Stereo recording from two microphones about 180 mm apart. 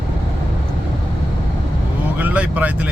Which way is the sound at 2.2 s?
10° right (ahead or behind).